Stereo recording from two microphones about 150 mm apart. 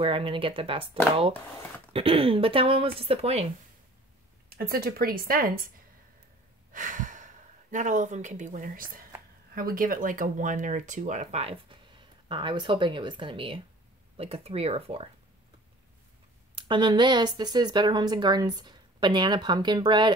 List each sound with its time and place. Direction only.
0.0 s speech: 35° right (ahead or behind)
1.9 s speech: 40° right (ahead or behind)
4.5 s speech: 90° right; by 5.7 s 75° right (ahead or behind)
6.7 s speech: 60° right (ahead or behind); by 15.0 s 40° right (ahead or behind)
16.5 s speech: 30° right (ahead or behind)